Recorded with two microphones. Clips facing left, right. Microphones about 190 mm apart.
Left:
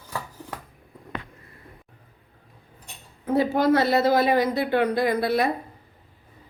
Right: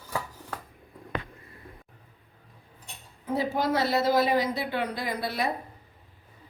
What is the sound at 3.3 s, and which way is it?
A woman's voice, 60° left (ahead or behind).